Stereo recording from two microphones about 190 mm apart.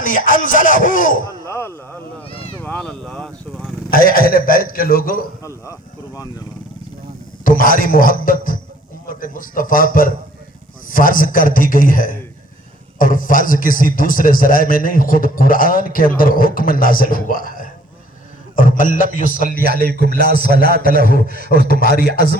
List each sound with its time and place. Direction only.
0.0 s a man's voice: 45° left (ahead or behind)
1.5 s speech: 15° left (ahead or behind)
2.6 s a sound: 10° left (ahead or behind)
3.9 s a man's voice: 50° left (ahead or behind)
7.4 s a man's voice: 45° left (ahead or behind)
19.6 s a man's voice: 55° right (ahead or behind)
21.7 s a man's voice: 50° left (ahead or behind)